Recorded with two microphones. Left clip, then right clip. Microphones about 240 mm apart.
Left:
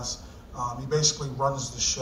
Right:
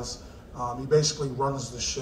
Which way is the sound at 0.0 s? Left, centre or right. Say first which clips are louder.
Left 2 dB; left.